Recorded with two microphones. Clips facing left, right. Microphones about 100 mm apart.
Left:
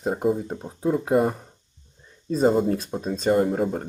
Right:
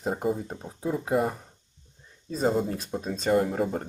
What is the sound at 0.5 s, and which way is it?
Speech, 20° left (ahead or behind).